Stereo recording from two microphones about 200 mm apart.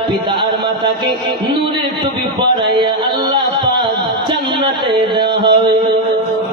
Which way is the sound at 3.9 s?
25° right (ahead or behind).